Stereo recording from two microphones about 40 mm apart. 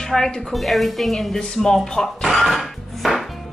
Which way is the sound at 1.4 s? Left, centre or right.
Left.